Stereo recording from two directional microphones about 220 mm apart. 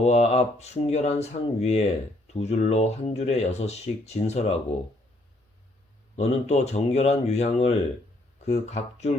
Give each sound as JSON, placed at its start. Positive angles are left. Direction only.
{"t": 0.0, "sound": "speech", "side_deg": 30}
{"t": 6.1, "sound": "speech", "side_deg": 30}